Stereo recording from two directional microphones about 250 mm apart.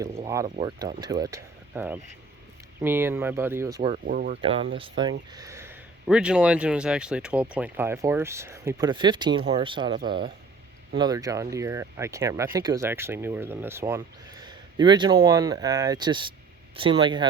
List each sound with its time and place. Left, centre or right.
0.0 s speech: centre
0.4 s speech: right
4.0 s speech: right
4.4 s speech: right